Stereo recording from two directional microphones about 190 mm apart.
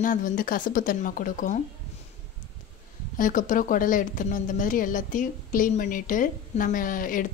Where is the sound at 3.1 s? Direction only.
45° left (ahead or behind).